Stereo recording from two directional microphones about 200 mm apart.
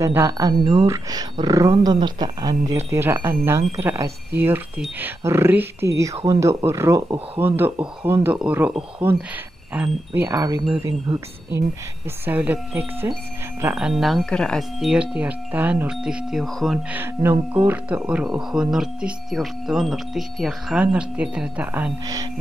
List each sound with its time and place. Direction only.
0.0 s speech: 15° right (ahead or behind)
22.0 s speech: 20° right (ahead or behind)